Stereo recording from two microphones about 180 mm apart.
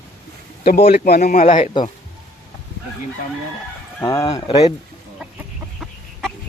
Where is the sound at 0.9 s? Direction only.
60° left (ahead or behind).